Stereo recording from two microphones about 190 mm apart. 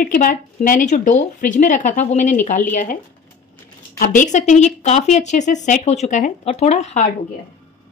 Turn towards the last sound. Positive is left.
turn(degrees=35)  # may be behind; listen again after turning